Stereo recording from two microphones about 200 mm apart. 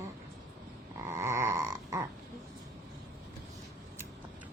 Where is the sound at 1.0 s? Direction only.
15° right (ahead or behind).